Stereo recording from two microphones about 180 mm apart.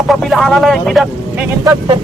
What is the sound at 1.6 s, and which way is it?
Speech, 20° right (ahead or behind).